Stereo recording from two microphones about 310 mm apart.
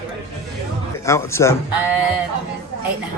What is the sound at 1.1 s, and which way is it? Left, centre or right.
Speech, centre.